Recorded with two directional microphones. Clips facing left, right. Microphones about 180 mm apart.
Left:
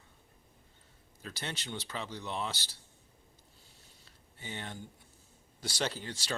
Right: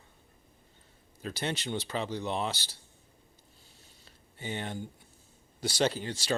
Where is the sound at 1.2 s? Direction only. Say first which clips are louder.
Right 8 dB; 20° right (ahead or behind).